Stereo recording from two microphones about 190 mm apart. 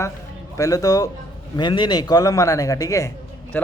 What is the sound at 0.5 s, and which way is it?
Speech, 15° left (ahead or behind).